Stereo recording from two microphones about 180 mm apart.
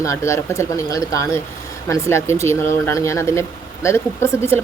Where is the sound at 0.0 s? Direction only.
15° left (ahead or behind).